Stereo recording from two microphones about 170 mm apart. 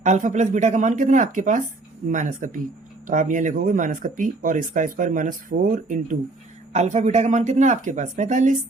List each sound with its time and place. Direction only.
0.0 s speech: 45° right (ahead or behind)